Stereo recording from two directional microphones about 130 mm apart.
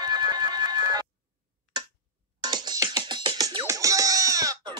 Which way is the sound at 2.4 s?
35° right (ahead or behind).